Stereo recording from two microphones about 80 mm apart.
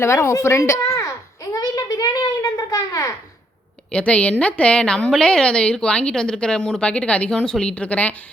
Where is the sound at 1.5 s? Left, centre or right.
Left.